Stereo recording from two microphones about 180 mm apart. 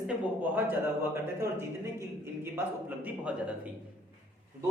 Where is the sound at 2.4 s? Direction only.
10° right (ahead or behind).